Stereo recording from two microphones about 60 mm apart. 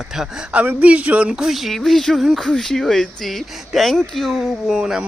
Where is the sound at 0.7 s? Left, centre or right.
Right.